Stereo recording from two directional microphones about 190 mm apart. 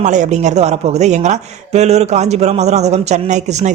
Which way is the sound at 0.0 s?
40° right (ahead or behind).